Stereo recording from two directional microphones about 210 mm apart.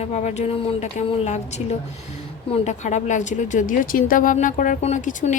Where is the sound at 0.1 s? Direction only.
35° left (ahead or behind).